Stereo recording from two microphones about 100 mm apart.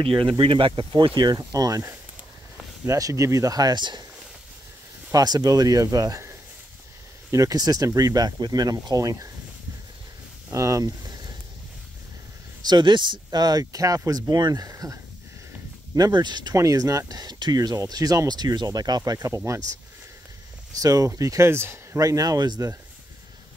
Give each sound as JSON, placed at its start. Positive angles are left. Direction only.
{"t": 0.0, "sound": "speech", "side_deg": -55}
{"t": 1.4, "sound": "speech", "side_deg": -35}
{"t": 5.1, "sound": "speech", "side_deg": -40}
{"t": 10.5, "sound": "speech", "side_deg": -30}
{"t": 11.0, "sound": "a sound", "side_deg": -40}
{"t": 12.6, "sound": "speech", "side_deg": -50}
{"t": 15.9, "sound": "speech", "side_deg": -45}
{"t": 16.5, "sound": "speech", "side_deg": -35}
{"t": 20.8, "sound": "speech", "side_deg": -35}